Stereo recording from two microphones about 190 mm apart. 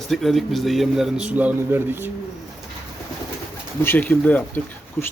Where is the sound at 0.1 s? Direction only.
Centre (ahead or behind).